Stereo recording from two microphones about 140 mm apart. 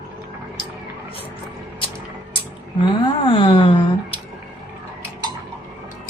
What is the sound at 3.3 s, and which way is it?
Speech, 40° left (ahead or behind).